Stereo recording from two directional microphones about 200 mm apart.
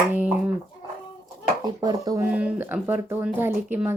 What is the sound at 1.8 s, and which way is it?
Speech, 20° right (ahead or behind).